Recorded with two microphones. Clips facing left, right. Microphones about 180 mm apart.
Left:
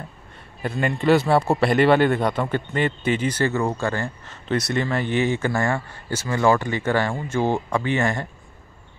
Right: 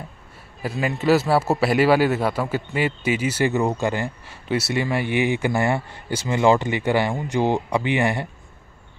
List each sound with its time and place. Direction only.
0.6 s a man's voice: 5° right (ahead or behind)